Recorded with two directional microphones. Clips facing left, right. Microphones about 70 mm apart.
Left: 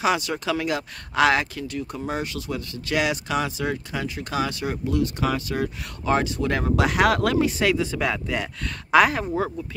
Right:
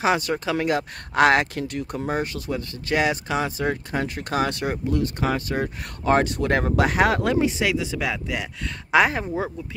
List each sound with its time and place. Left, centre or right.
0.0 s speech: right
2.0 s speech: right
3.9 s speech: right
7.2 s speech: centre
7.6 s speech: centre
8.9 s speech: right